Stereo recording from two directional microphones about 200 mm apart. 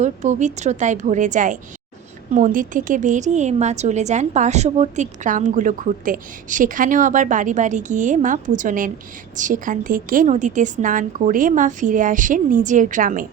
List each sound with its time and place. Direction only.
0.0 s a woman's voice: 35° right (ahead or behind)